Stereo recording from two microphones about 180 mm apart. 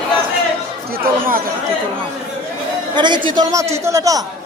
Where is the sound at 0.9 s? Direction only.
50° right (ahead or behind).